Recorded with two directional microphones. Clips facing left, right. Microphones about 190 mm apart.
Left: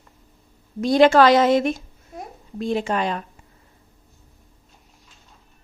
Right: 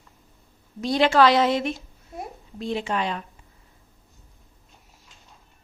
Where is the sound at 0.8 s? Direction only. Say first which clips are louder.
Left 5 dB; 45° left (ahead or behind).